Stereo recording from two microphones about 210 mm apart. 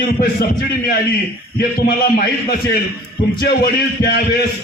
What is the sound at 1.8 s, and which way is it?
A man's voice, 50° left (ahead or behind).